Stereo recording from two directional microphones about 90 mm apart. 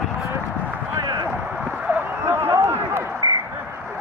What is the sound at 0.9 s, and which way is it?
Run, 55° right (ahead or behind).